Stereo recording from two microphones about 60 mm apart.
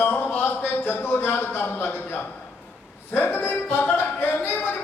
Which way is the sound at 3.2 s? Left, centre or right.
Left.